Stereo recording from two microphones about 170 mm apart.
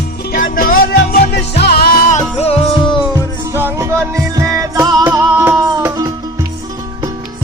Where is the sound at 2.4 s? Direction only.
35° left (ahead or behind).